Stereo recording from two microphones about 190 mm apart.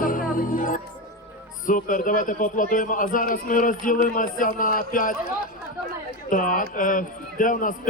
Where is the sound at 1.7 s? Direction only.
45° left (ahead or behind).